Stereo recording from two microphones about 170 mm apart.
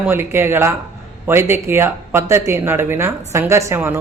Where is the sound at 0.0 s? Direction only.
15° right (ahead or behind).